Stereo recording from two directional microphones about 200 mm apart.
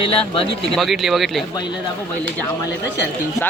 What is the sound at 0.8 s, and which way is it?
Speech, centre (ahead or behind).